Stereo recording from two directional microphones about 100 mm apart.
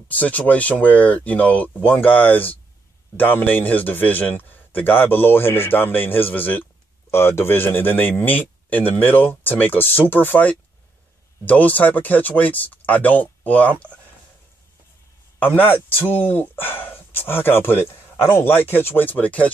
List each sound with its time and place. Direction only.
0.1 s a man's voice: 15° left (ahead or behind)
15.3 s a man's voice: 20° left (ahead or behind)